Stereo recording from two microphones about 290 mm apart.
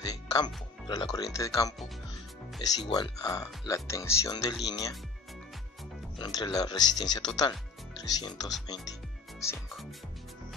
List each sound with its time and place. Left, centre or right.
0.0 s music: centre
0.8 s speech: centre
6.1 s speech: centre